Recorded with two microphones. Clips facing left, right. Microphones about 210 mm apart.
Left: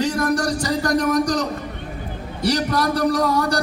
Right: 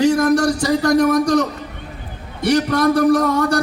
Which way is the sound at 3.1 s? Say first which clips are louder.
Right 4 dB; 35° left (ahead or behind).